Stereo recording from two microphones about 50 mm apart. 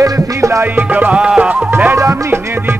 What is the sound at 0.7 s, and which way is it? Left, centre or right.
Music, right.